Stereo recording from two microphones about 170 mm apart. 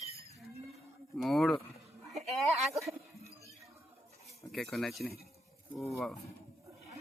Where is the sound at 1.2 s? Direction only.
Centre (ahead or behind).